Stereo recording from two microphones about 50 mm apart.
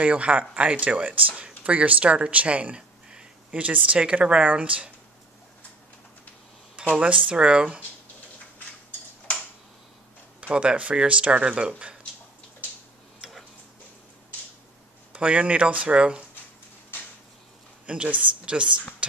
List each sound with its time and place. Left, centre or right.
0.0 s speech: right
6.8 s a sound: right
7.2 s speech: right
10.5 s speech: right
15.1 s speech: right
17.8 s speech: right